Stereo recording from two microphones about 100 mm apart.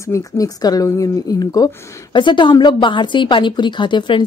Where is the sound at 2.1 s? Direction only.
55° left (ahead or behind).